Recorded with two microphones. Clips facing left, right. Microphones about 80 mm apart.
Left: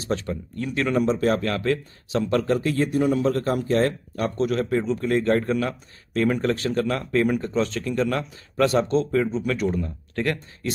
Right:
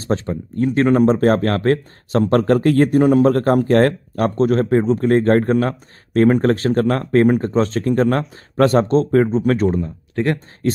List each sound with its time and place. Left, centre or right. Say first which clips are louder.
0.0 s speech: right 5 dB; right